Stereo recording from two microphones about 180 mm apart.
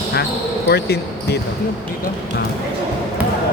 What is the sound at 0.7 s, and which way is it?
Speech, 65° left (ahead or behind).